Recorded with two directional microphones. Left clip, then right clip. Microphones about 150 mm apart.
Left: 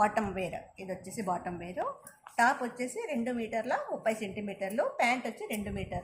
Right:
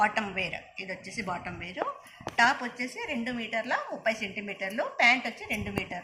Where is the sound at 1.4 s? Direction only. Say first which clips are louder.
Right 1 dB; 80° left.